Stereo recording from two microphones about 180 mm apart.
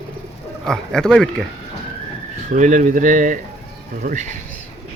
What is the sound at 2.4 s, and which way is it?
Speech, 45° right (ahead or behind).